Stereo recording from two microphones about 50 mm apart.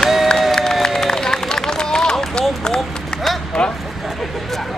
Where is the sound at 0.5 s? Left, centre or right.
Centre.